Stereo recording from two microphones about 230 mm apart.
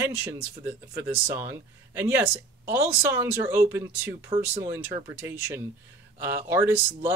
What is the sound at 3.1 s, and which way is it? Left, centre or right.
Speech, centre.